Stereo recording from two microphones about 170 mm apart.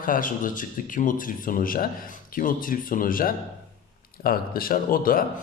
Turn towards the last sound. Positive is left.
turn(degrees=55)  # may be behind; listen again after turning